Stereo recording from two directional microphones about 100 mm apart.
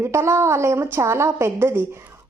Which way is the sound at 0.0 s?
25° right (ahead or behind).